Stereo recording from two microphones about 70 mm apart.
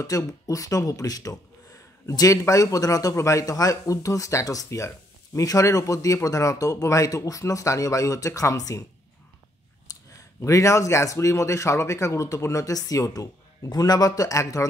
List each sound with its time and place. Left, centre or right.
0.0 s speech: left
9.9 s a sound: left
10.4 s speech: left